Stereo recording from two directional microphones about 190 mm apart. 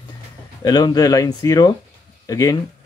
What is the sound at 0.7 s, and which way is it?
Speech, 20° left (ahead or behind).